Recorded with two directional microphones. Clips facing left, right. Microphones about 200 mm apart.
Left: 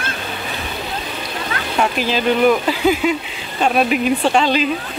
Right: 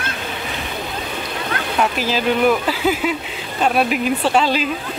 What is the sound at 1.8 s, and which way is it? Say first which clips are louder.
Speech: left 2 dB; 5° right (ahead or behind).